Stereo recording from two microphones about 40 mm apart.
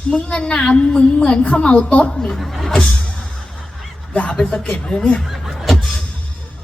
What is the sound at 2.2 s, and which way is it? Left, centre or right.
Speech, centre.